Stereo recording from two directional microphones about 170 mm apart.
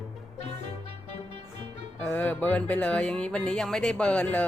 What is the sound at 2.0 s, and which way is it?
Speech, 10° left (ahead or behind).